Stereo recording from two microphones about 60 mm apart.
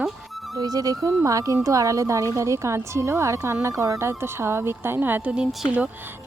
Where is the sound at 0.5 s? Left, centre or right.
Right.